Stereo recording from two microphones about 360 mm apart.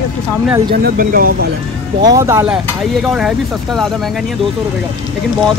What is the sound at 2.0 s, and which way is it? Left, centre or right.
Speech, centre.